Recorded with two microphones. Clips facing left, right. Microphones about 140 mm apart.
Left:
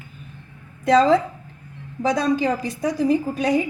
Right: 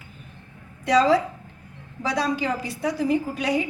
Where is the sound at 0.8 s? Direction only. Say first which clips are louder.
Left 3 dB; 50° left (ahead or behind).